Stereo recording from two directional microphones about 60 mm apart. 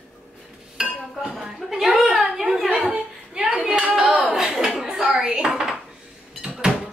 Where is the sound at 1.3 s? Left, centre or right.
Centre.